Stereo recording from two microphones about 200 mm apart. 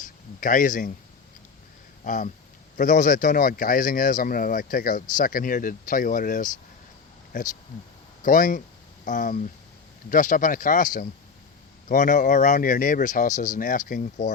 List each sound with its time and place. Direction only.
0.0 s a sound: 45° left (ahead or behind)
2.0 s speech: 40° left (ahead or behind)
8.2 s speech: 40° left (ahead or behind)